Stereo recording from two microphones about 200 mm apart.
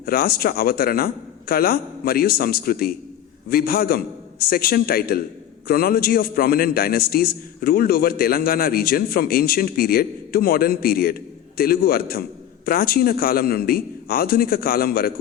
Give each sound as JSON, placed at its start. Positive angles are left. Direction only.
{"t": 0.0, "sound": "a man's voice", "side_deg": 50}